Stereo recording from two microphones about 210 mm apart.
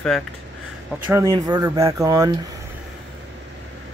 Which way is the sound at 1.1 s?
15° right (ahead or behind).